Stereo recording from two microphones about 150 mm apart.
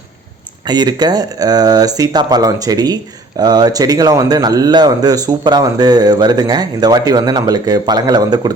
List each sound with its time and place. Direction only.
0.6 s speech: 30° right (ahead or behind)